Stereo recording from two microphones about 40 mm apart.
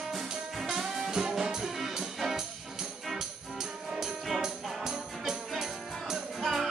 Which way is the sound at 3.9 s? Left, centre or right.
Centre.